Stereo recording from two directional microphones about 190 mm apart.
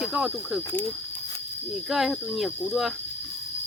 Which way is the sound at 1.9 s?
Centre (ahead or behind).